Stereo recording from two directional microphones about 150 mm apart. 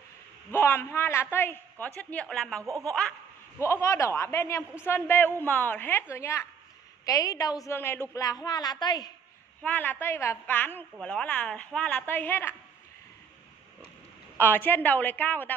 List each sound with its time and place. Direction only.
0.5 s a woman's voice: 15° left (ahead or behind)
2.6 s speech: 20° right (ahead or behind)
3.6 s a woman's voice: 20° left (ahead or behind)
9.6 s a woman's voice: 10° left (ahead or behind)
14.3 s a woman's voice: 15° left (ahead or behind)